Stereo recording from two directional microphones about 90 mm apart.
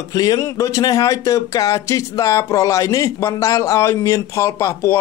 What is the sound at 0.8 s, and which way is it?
Speech, 45° left (ahead or behind).